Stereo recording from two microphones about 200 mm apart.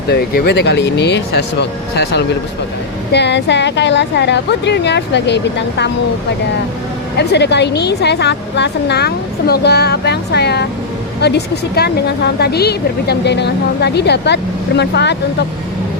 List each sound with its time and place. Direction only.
0.1 s a woman's voice: 55° left (ahead or behind)
7.2 s a woman's voice: 55° left (ahead or behind)